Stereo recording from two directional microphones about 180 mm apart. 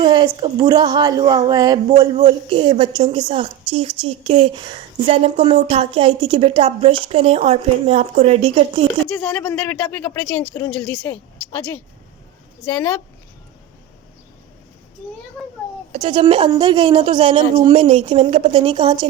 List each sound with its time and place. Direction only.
0.0 s a woman's voice: 25° right (ahead or behind)
9.6 s a woman's voice: 5° left (ahead or behind)
12.7 s a woman's voice: 10° left (ahead or behind)
15.9 s a woman's voice: 35° right (ahead or behind)